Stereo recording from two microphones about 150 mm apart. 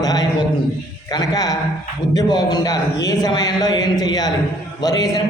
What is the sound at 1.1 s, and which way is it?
A man's voice, 25° left (ahead or behind).